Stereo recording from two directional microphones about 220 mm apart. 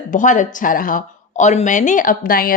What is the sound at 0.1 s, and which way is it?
A woman's voice, 35° left (ahead or behind).